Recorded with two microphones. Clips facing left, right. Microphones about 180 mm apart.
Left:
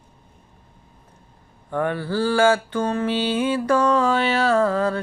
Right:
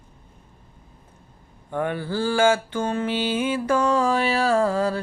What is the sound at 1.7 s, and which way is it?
Mantra, 15° right (ahead or behind).